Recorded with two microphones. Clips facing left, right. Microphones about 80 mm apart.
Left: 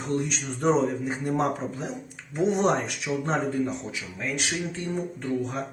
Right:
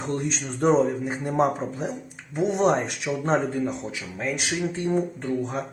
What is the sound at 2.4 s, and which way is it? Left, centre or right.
Speech, centre.